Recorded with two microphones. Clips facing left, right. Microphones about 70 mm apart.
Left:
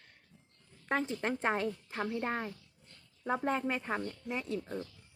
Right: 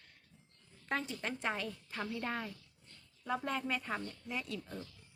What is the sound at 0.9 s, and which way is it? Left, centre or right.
Speech, left.